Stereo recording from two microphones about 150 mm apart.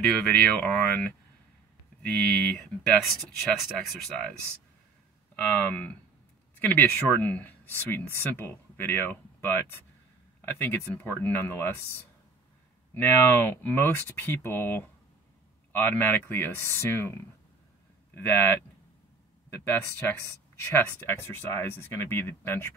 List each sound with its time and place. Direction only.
0.0 s speech: 5° left (ahead or behind)
2.1 s speech: 5° left (ahead or behind)
5.6 s speech: 10° left (ahead or behind)
12.9 s speech: 15° left (ahead or behind)
19.6 s speech: 15° left (ahead or behind)